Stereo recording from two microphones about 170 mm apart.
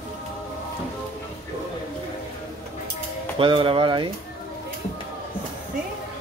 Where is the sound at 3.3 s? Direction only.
30° right (ahead or behind).